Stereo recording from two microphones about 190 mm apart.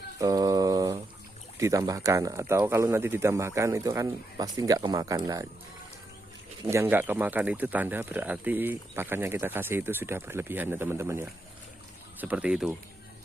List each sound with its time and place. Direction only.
0.2 s a sound: 20° right (ahead or behind)
1.5 s speech: 15° right (ahead or behind)
6.6 s speech: 15° right (ahead or behind)